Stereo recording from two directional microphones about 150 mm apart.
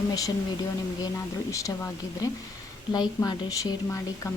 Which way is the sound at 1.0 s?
20° left (ahead or behind).